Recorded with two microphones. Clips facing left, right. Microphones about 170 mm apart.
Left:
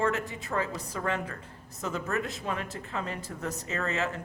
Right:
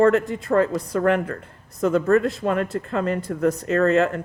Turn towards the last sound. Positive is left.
turn(degrees=-60)  # may be behind; listen again after turning